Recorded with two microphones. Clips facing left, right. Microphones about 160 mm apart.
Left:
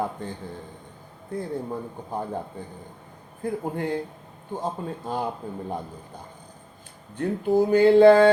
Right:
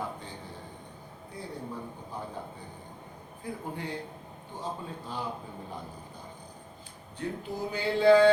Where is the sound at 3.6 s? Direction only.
50° left (ahead or behind).